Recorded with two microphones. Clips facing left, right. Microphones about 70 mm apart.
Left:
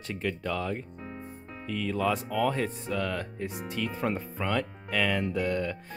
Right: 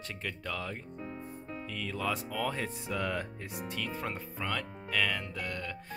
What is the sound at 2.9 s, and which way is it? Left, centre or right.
Speech, centre.